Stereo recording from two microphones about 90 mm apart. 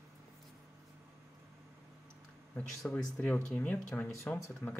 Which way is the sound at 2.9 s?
20° left (ahead or behind).